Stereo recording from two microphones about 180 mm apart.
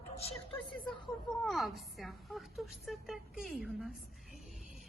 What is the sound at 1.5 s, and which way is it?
A woman's voice, centre (ahead or behind).